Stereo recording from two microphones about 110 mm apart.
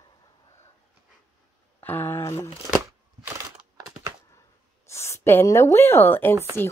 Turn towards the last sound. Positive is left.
turn(degrees=20)  # may be behind; listen again after turning